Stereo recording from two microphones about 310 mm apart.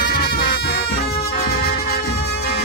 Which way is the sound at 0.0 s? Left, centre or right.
Left.